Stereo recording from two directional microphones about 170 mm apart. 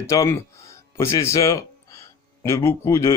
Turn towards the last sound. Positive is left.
turn(degrees=15)  # may be behind; listen again after turning